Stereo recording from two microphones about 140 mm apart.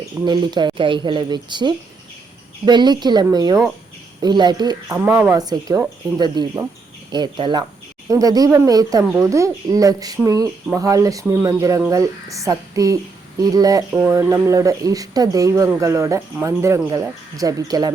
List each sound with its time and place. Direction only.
0.0 s speech: 30° right (ahead or behind)
4.9 s speech: 15° right (ahead or behind)
13.9 s speech: 15° right (ahead or behind)